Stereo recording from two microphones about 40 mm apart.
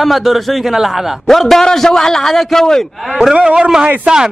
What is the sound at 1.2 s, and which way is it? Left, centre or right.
A man's voice, centre.